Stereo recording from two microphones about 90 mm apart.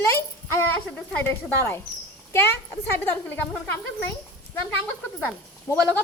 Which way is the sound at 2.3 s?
25° left (ahead or behind).